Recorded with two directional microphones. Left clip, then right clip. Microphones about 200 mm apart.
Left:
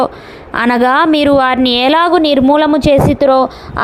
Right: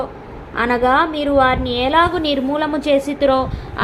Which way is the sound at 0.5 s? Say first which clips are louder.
Left 4 dB; 50° left (ahead or behind).